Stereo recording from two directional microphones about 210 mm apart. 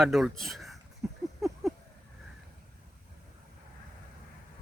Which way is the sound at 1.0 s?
10° right (ahead or behind).